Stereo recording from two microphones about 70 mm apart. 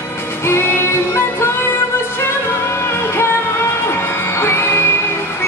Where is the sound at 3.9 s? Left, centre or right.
Left.